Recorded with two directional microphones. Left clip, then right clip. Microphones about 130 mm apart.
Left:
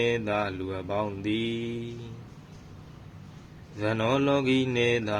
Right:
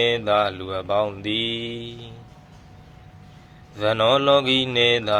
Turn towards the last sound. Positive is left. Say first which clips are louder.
# right 7 dB
turn(degrees=20)  # may be behind; listen again after turning